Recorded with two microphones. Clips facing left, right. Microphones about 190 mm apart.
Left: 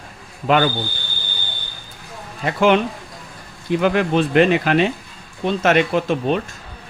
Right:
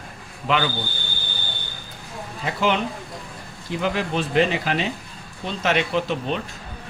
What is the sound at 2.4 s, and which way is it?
Speech, 55° left (ahead or behind).